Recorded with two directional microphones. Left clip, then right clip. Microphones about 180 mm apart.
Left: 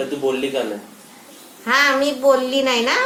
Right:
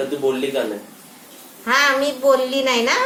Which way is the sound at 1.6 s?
10° left (ahead or behind).